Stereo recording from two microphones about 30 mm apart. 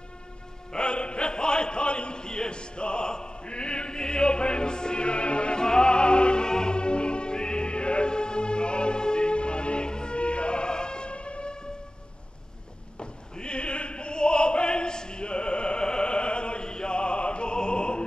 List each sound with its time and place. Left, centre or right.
0.7 s a sound: left
5.6 s music: left
13.0 s opera: left